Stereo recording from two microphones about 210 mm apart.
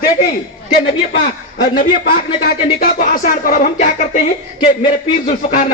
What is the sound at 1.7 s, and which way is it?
A man's voice, 45° left (ahead or behind).